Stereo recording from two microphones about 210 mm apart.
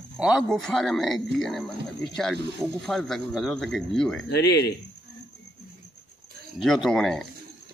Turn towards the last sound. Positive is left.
turn(degrees=0)  # may be behind; listen again after turning